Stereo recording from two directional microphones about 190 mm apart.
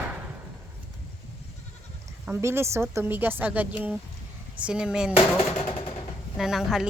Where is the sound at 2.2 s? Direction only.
10° right (ahead or behind).